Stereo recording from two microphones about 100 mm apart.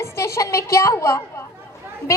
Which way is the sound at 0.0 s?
30° left (ahead or behind).